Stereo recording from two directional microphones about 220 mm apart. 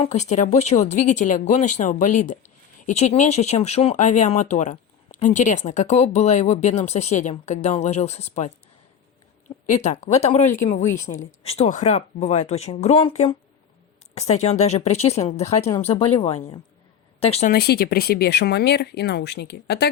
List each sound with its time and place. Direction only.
0.0 s speech: 30° left (ahead or behind)
9.6 s speech: 30° left (ahead or behind)
17.5 s speech: 45° left (ahead or behind)